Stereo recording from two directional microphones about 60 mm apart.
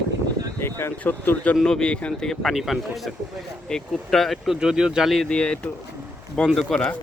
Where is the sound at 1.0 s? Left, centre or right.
Left.